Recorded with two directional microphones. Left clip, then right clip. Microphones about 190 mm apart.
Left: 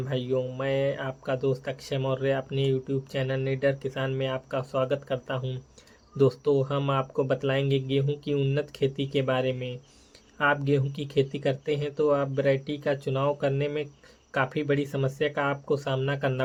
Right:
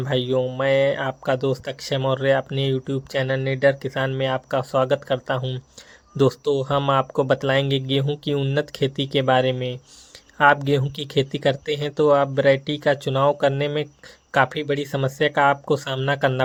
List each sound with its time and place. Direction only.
0.0 s speech: 45° right (ahead or behind)